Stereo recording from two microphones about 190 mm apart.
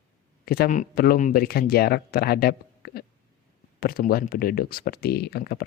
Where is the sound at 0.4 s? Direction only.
55° left (ahead or behind).